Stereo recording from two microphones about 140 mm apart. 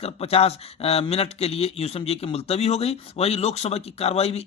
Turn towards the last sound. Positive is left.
turn(degrees=50)  # may be behind; listen again after turning